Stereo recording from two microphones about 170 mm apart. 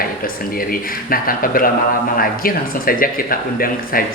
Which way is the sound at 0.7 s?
55° left (ahead or behind).